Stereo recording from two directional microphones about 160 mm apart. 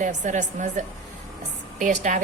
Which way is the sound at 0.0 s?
50° right (ahead or behind).